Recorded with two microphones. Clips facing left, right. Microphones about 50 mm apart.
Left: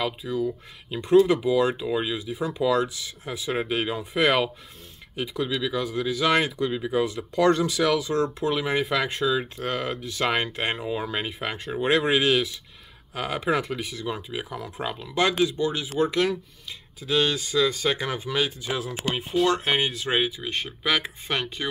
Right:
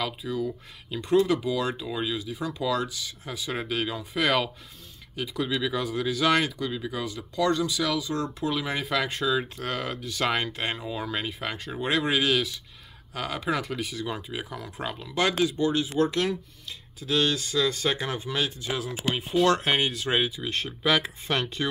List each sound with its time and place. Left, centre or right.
0.2 s speech: centre
5.3 s speech: centre; by 8.3 s left
8.4 s speech: centre
13.7 s speech: centre
19.9 s speech: left
20.2 s speech: centre